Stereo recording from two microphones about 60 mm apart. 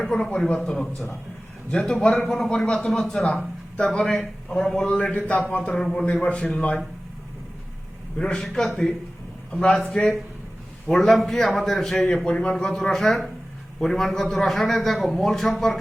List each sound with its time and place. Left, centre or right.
0.0 s a man's voice: centre
5.1 s speech: left
5.8 s a man's voice: centre
6.1 s a man's voice: centre
8.2 s a man's voice: centre
9.5 s a man's voice: centre
10.8 s a man's voice: centre
12.0 s a man's voice: centre